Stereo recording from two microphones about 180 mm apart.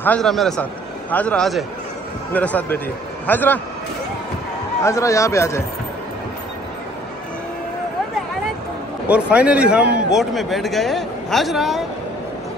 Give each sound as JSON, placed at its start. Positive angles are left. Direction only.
{"t": 0.0, "sound": "a man's voice", "side_deg": 5}
{"t": 4.8, "sound": "a man's voice", "side_deg": 15}
{"t": 9.0, "sound": "a man's voice", "side_deg": -5}